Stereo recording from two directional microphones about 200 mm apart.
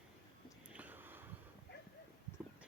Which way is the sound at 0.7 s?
10° right (ahead or behind).